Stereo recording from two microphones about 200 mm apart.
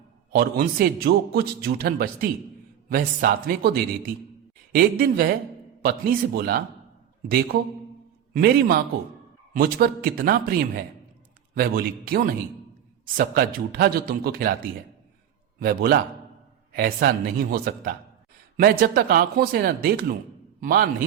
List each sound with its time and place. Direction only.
0.3 s a man's voice: 45° right (ahead or behind)
15.6 s a man's voice: 50° right (ahead or behind)